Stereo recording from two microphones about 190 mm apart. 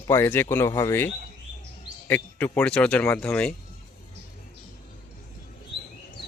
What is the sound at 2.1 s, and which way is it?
Speech, 10° left (ahead or behind).